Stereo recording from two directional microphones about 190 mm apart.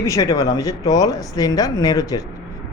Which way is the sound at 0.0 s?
15° left (ahead or behind).